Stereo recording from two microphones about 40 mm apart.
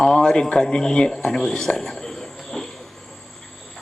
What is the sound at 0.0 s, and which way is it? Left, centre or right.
Speech, centre.